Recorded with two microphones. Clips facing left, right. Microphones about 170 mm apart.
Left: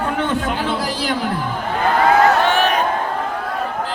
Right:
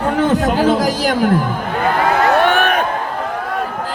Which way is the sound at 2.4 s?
55° right (ahead or behind).